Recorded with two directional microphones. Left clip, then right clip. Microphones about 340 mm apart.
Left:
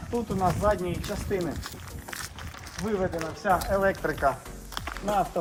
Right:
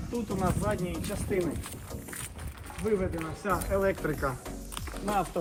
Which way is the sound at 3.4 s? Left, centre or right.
Centre.